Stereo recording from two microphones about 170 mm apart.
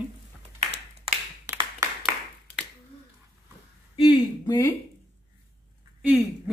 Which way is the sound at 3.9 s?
25° left (ahead or behind).